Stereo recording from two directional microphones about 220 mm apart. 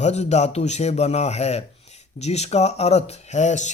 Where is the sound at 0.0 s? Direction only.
30° left (ahead or behind).